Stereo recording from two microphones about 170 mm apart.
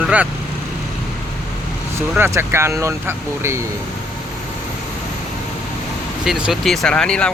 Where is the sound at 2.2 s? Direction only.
15° right (ahead or behind).